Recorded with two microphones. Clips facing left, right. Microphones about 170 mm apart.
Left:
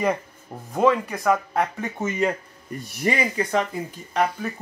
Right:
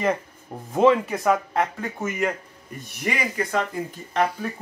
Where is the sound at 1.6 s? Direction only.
20° left (ahead or behind).